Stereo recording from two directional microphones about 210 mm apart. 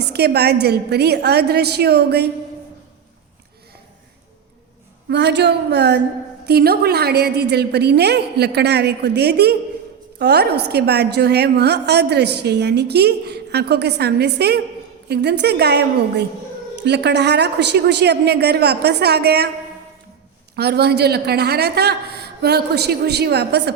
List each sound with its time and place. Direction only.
0.1 s a woman's voice: 50° right (ahead or behind)
5.0 s a woman's voice: 55° right (ahead or behind)
20.6 s a woman's voice: 50° right (ahead or behind)